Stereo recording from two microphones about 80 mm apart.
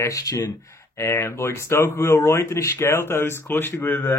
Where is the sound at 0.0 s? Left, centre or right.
Left.